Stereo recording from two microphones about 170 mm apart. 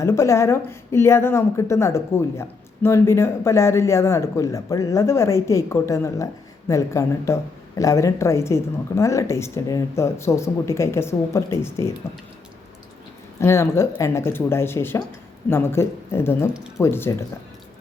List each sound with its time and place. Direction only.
0.0 s a woman's voice: 15° left (ahead or behind)
13.4 s a woman's voice: 15° left (ahead or behind)